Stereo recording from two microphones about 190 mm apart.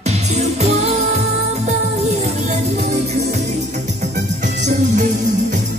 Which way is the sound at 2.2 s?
35° right (ahead or behind).